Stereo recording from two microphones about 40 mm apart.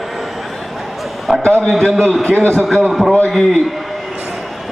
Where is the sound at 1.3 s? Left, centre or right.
Centre.